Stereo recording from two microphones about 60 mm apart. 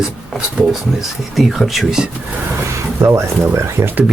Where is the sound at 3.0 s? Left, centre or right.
Right.